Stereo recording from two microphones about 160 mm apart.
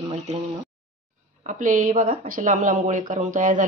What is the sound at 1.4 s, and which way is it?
Speech, 50° right (ahead or behind).